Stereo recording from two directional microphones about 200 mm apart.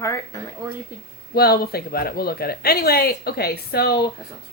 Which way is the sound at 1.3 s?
50° left (ahead or behind).